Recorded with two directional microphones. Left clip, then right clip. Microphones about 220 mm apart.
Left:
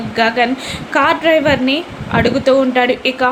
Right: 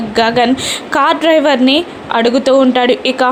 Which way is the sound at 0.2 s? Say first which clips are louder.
Right 3 dB; 15° right (ahead or behind).